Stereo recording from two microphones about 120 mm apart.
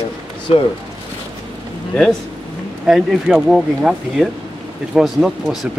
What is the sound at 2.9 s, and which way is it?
Speech, 5° right (ahead or behind).